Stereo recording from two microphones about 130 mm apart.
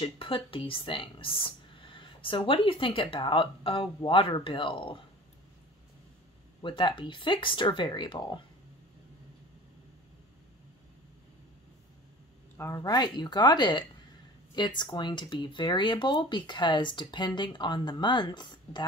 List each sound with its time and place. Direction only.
0.0 s speech: 45° left (ahead or behind)
6.6 s speech: 40° left (ahead or behind)
12.5 s speech: 25° left (ahead or behind)